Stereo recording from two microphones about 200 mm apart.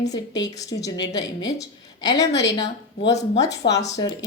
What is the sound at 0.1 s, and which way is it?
A woman's voice, 20° left (ahead or behind).